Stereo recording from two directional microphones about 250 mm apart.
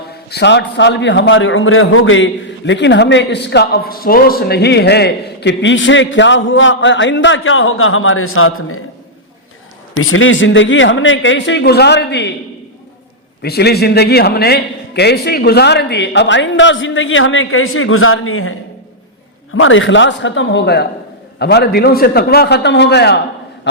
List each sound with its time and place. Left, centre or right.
0.3 s a man's voice: left
9.9 s a man's voice: left
13.4 s a man's voice: left
19.5 s a man's voice: left